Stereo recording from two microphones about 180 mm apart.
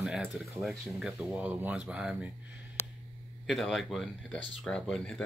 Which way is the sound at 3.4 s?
Centre (ahead or behind).